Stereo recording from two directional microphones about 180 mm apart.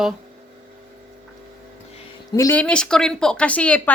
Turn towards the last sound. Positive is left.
turn(degrees=5)  # may be behind; listen again after turning